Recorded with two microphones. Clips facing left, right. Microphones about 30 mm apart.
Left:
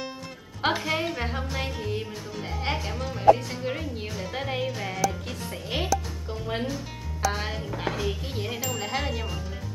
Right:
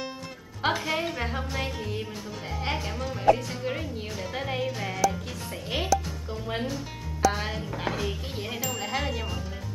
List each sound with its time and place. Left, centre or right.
0.6 s speech: centre